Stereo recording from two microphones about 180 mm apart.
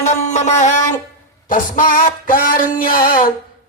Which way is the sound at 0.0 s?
40° left (ahead or behind).